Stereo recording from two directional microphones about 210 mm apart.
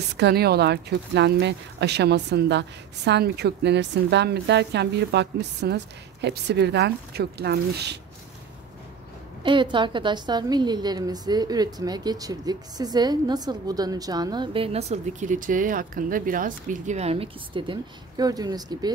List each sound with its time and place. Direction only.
0.2 s speech: 50° right (ahead or behind)
9.4 s a woman's voice: 25° right (ahead or behind)